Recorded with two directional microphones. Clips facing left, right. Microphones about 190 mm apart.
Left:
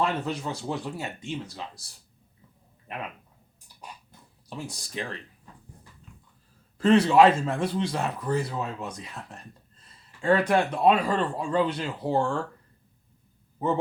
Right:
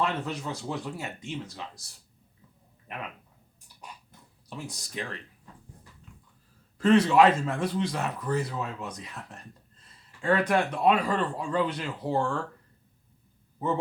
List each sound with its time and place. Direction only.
0.0 s speech: 30° left (ahead or behind)
4.4 s speech: 30° left (ahead or behind)
6.7 s a man's voice: 30° left (ahead or behind)